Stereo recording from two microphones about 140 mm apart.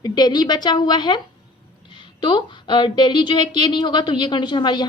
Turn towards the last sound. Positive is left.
turn(degrees=30)  # may be behind; listen again after turning